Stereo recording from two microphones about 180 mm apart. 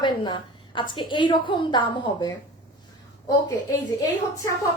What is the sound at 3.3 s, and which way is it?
Speech, 20° left (ahead or behind).